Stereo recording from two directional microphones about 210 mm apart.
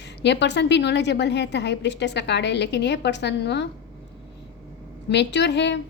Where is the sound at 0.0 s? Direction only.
55° left (ahead or behind).